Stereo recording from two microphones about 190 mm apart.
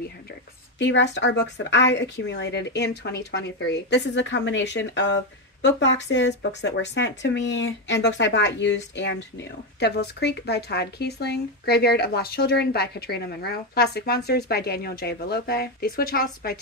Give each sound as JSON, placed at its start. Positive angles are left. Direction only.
{"t": 0.7, "sound": "speech", "side_deg": 70}